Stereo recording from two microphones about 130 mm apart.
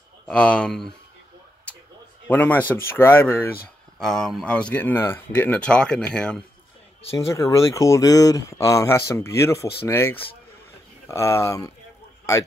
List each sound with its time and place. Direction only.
0.3 s speech: 10° left (ahead or behind)
2.2 s a man's voice: 15° left (ahead or behind)
4.0 s speech: 5° left (ahead or behind)
7.2 s speech: 25° left (ahead or behind)